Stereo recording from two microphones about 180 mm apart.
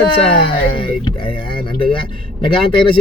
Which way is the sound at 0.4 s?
30° left (ahead or behind).